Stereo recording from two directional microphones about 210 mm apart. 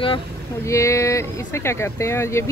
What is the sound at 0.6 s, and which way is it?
Speech, 15° left (ahead or behind).